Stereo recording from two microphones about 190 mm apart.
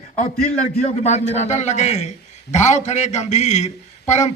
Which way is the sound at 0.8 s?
35° left (ahead or behind).